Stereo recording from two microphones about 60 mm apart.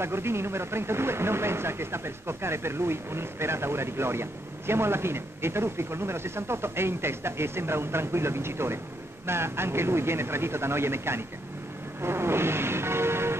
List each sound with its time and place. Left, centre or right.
0.0 s speech: right
12.0 s vehicle: right